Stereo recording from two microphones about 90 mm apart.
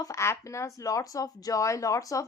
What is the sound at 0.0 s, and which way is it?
Speech, 35° left (ahead or behind).